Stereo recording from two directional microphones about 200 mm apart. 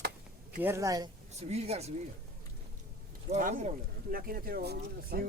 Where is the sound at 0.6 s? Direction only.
15° right (ahead or behind).